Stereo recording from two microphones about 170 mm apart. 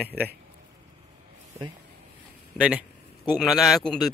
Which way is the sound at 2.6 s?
5° right (ahead or behind).